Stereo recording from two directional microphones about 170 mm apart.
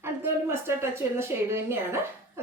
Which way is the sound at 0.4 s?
15° right (ahead or behind).